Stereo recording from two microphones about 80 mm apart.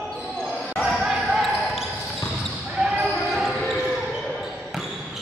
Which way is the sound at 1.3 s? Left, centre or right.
Centre.